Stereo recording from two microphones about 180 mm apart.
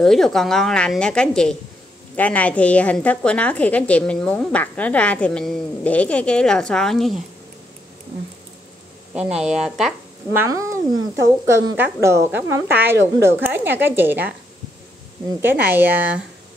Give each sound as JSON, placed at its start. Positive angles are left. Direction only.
{"t": 0.0, "sound": "a woman's voice", "side_deg": 0}
{"t": 9.1, "sound": "speech", "side_deg": -5}
{"t": 10.4, "sound": "a woman's voice", "side_deg": -15}
{"t": 15.4, "sound": "a woman's voice", "side_deg": -10}